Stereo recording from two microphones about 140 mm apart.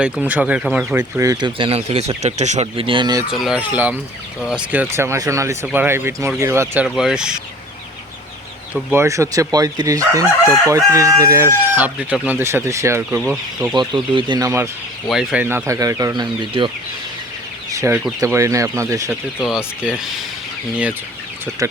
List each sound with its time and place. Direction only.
0.0 s speech: 10° right (ahead or behind); by 3.2 s 35° right (ahead or behind)
3.3 s speech: 5° right (ahead or behind)
6.8 s speech: 5° right (ahead or behind)
8.7 s speech: 15° right (ahead or behind)
13.7 s speech: 35° right (ahead or behind)
15.0 s speech: centre (ahead or behind)
15.4 s speech: 20° right (ahead or behind); by 16.7 s 35° right (ahead or behind)
17.7 s chicken: 25° right (ahead or behind)
18.2 s speech: 20° right (ahead or behind)
19.4 s speech: 5° right (ahead or behind)